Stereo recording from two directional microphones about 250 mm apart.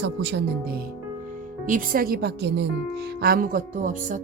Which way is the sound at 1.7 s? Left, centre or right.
Right.